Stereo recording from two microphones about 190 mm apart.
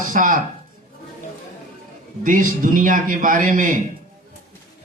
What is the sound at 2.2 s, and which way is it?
A man's voice, 45° right (ahead or behind).